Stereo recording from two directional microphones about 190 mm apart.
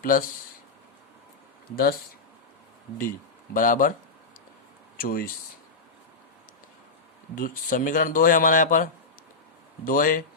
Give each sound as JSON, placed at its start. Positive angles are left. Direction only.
{"t": 0.0, "sound": "speech", "side_deg": 45}
{"t": 1.7, "sound": "speech", "side_deg": 50}
{"t": 3.5, "sound": "speech", "side_deg": 45}
{"t": 4.9, "sound": "speech", "side_deg": 50}
{"t": 7.3, "sound": "speech", "side_deg": 45}